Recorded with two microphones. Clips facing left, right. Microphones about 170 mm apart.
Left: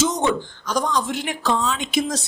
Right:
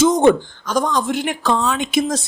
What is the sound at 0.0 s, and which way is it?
Speech, 50° right (ahead or behind).